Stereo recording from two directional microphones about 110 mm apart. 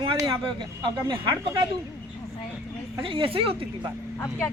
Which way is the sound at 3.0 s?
55° right (ahead or behind).